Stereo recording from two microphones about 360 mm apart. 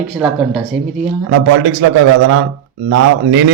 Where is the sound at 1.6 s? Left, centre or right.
Right.